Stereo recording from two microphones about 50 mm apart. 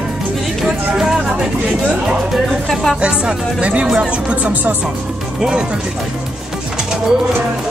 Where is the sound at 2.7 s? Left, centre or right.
Centre.